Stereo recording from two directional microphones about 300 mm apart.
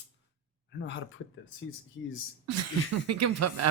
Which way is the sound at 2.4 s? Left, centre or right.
Right.